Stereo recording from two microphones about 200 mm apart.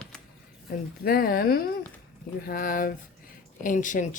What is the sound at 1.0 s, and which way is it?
Speech, 50° left (ahead or behind).